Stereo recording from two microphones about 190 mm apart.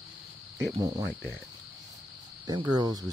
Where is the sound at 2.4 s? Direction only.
20° right (ahead or behind).